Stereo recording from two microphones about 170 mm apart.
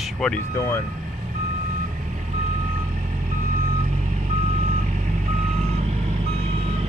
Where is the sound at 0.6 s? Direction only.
15° left (ahead or behind).